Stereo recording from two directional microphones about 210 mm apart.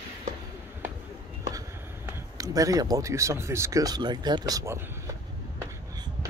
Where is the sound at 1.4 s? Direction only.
15° right (ahead or behind).